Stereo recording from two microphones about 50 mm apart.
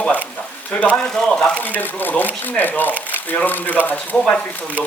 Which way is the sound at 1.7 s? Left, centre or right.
Left.